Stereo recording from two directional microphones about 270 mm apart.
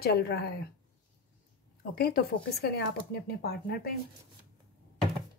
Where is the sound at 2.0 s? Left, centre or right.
Left.